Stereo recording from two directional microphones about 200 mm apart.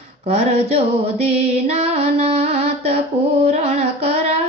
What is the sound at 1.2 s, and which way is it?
Music, 30° right (ahead or behind).